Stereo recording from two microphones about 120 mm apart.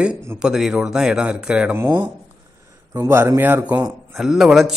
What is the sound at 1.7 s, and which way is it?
Speech, 20° right (ahead or behind).